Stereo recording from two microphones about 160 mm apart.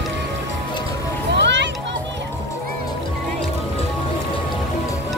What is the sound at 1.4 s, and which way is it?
Children playing, 90° right.